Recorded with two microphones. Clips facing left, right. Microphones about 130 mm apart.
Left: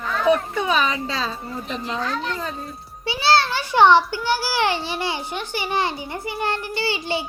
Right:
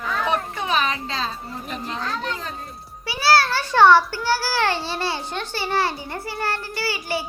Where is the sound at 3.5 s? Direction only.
15° left (ahead or behind).